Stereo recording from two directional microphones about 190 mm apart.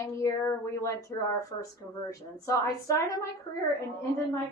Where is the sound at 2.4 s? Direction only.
15° left (ahead or behind).